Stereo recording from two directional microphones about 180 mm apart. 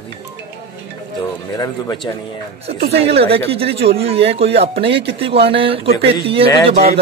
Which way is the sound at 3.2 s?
30° right (ahead or behind).